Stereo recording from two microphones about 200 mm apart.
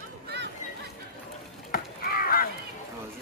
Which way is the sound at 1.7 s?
45° left (ahead or behind).